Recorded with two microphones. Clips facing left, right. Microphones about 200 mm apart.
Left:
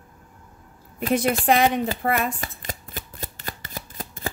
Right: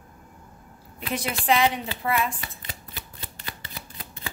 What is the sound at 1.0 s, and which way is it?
Shuffling cards, 50° left (ahead or behind).